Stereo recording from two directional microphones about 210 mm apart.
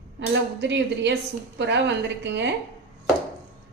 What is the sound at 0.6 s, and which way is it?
A woman's voice, 55° right (ahead or behind).